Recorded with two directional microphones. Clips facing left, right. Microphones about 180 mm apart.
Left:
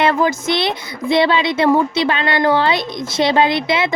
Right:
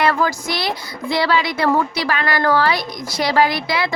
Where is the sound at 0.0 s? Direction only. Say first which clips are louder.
Left 3 dB; 20° left (ahead or behind).